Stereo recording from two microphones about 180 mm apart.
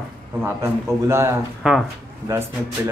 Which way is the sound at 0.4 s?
15° right (ahead or behind).